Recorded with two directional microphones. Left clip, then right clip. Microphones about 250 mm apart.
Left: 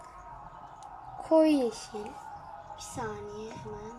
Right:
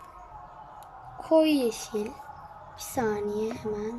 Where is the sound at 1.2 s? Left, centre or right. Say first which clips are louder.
Right 1 dB; centre.